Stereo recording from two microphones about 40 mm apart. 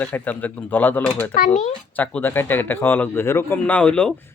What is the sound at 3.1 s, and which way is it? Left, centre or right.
Speech, left.